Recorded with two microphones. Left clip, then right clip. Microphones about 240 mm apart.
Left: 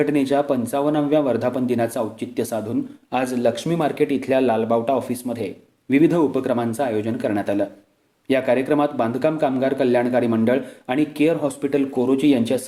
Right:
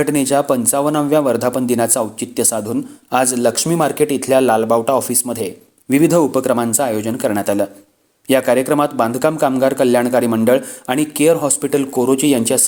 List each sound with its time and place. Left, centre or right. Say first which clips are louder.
0.0 s speech: right 4 dB; right